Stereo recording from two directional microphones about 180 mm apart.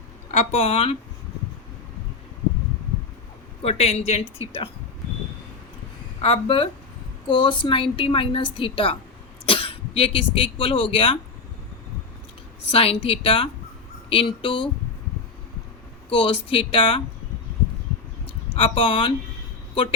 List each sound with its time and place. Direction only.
0.3 s speech: 35° left (ahead or behind)
3.6 s speech: 35° left (ahead or behind)
6.2 s a woman's voice: 30° left (ahead or behind)
12.7 s a woman's voice: 30° left (ahead or behind)
16.0 s a woman's voice: 30° left (ahead or behind)
18.5 s a woman's voice: 30° left (ahead or behind)